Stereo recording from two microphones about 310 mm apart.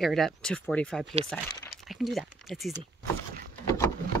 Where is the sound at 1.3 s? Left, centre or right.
Centre.